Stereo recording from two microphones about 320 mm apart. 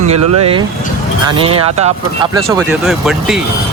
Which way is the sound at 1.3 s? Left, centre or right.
Centre.